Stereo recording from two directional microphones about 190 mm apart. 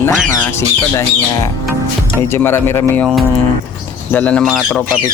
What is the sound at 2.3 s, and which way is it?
Speech, 10° left (ahead or behind).